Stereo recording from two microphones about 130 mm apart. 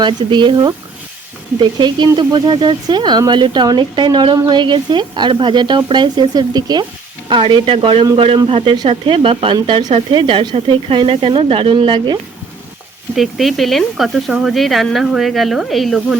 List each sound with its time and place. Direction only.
0.0 s speech: 35° right (ahead or behind)
13.1 s speech: centre (ahead or behind)